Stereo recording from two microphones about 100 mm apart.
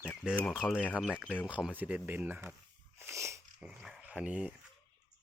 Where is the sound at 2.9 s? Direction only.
25° right (ahead or behind).